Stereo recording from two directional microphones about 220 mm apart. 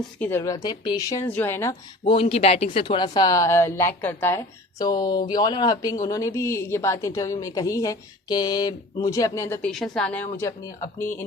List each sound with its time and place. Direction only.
0.2 s speech: 10° left (ahead or behind)
2.0 s speech: 25° left (ahead or behind)